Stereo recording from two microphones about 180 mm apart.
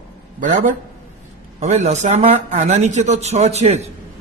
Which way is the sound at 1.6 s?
40° right (ahead or behind).